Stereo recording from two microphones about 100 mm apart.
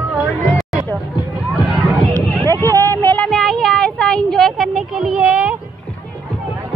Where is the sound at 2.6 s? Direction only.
35° right (ahead or behind).